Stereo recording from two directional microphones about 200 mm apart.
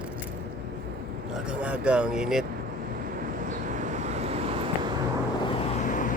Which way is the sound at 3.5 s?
40° right (ahead or behind).